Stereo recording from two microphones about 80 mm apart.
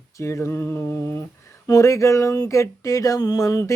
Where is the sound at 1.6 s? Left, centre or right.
Left.